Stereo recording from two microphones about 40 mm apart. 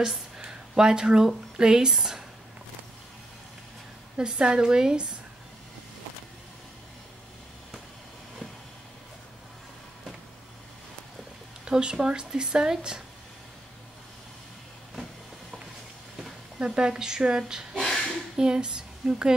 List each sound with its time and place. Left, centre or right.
0.5 s speech: centre
4.2 s speech: right
11.6 s speech: centre
16.5 s speech: right
17.7 s a sound: centre
18.3 s speech: centre